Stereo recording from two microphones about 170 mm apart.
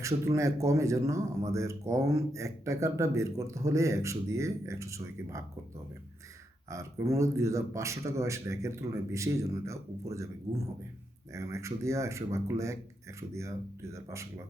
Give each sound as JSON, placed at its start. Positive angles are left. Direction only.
{"t": 0.0, "sound": "speech", "side_deg": -20}
{"t": 6.7, "sound": "speech", "side_deg": -15}
{"t": 11.3, "sound": "speech", "side_deg": -15}